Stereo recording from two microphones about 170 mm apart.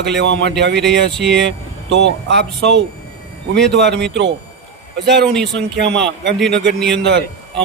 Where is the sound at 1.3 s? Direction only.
90° right.